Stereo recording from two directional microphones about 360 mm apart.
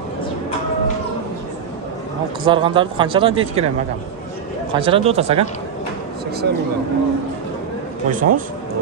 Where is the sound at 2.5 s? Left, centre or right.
Centre.